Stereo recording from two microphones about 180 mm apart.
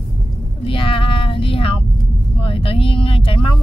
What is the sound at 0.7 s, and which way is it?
Child singing, 30° left (ahead or behind).